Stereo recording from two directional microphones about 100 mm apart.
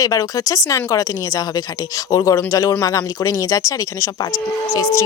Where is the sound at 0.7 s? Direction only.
30° left (ahead or behind).